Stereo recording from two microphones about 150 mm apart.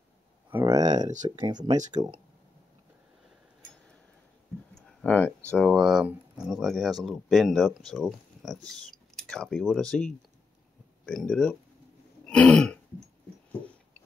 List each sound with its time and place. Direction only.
0.5 s speech: 15° right (ahead or behind)
5.0 s speech: 10° left (ahead or behind)
12.3 s throat clearing: 5° left (ahead or behind)